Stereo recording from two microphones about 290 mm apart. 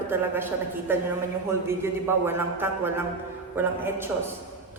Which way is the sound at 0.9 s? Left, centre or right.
Centre.